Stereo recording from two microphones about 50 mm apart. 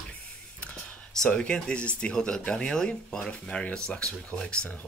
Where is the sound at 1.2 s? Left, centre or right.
Left.